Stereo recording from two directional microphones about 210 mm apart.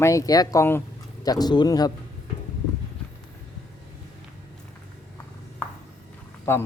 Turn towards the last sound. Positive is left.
turn(degrees=10)  # may be behind; listen again after turning